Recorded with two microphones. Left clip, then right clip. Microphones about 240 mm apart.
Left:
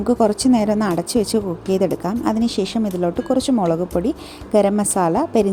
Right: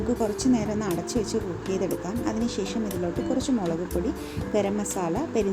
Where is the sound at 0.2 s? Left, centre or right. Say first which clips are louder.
Left 9 dB; left.